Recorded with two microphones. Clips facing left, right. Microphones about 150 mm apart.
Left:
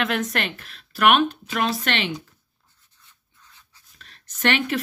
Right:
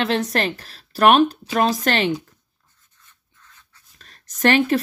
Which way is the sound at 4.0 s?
40° right (ahead or behind).